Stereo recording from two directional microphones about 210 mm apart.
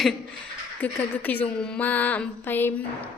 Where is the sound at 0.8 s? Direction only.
10° left (ahead or behind).